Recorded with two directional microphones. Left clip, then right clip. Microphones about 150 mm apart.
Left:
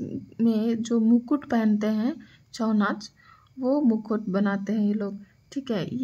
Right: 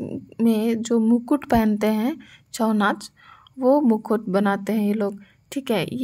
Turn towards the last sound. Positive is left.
turn(degrees=-25)  # may be behind; listen again after turning